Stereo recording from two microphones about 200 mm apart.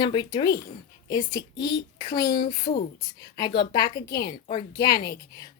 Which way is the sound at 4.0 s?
50° left (ahead or behind).